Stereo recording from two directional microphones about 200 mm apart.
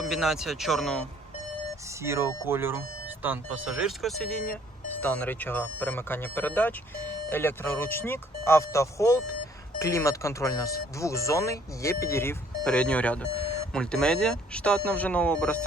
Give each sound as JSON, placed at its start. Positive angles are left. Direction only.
{"t": 0.1, "sound": "speech", "side_deg": 0}
{"t": 2.0, "sound": "speech", "side_deg": -15}